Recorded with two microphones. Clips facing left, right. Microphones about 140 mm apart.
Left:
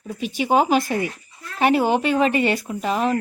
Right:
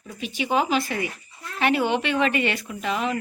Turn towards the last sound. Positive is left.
turn(degrees=40)  # may be behind; listen again after turning